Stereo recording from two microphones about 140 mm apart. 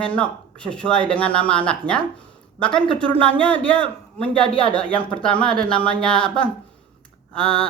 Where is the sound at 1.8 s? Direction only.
35° right (ahead or behind).